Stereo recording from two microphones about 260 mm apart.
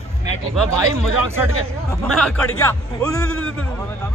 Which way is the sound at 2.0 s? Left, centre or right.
Centre.